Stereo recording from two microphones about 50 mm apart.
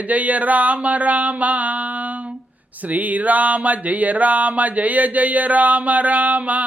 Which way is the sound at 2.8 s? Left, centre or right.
Right.